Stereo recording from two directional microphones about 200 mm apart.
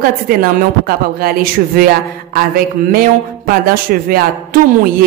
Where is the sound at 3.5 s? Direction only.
45° right (ahead or behind).